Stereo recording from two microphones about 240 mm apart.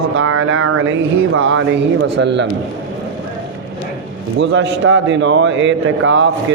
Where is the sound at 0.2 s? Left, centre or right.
Right.